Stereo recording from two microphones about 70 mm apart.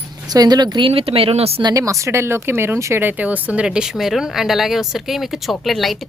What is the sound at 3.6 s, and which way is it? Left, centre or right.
Speech, centre.